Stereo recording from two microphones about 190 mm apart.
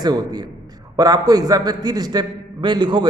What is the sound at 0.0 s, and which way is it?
A man's voice, 20° right (ahead or behind).